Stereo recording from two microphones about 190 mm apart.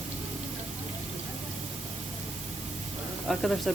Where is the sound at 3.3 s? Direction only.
Centre (ahead or behind).